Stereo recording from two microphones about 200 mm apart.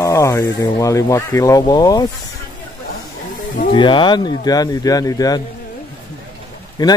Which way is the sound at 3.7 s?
25° left (ahead or behind).